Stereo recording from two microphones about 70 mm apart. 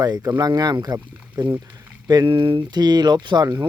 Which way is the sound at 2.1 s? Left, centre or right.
Right.